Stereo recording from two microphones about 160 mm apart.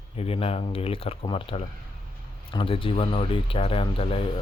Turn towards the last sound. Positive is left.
turn(degrees=35)  # may be behind; listen again after turning